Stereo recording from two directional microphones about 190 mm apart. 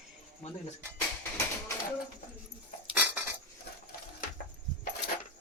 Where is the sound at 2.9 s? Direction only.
5° right (ahead or behind).